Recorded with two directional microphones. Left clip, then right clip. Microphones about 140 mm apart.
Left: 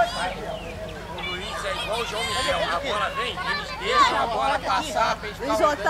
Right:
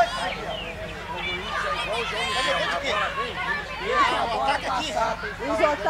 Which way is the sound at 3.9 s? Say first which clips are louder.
Left 2 dB; 20° left (ahead or behind).